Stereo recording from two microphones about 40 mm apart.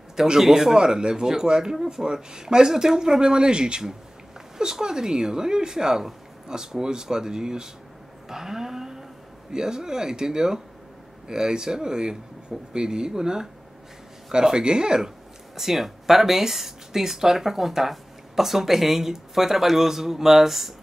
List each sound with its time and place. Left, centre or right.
0.1 s speech: centre
15.5 s speech: centre